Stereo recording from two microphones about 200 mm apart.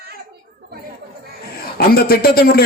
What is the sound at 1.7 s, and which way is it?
Speech, 50° left (ahead or behind).